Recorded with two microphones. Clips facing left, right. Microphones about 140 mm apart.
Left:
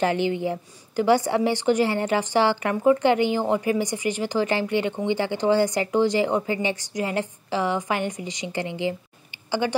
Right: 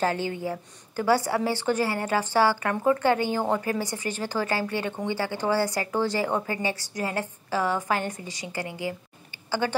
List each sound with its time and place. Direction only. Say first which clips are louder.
0.0 s a woman's voice: left 4 dB; 20° left (ahead or behind)